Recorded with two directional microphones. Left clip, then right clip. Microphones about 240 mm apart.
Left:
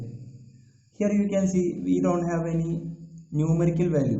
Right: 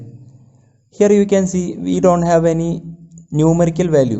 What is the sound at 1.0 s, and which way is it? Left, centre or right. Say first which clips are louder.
A man's voice: right 13 dB; right.